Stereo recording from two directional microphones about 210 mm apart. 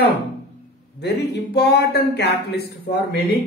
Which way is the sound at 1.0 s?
50° left (ahead or behind).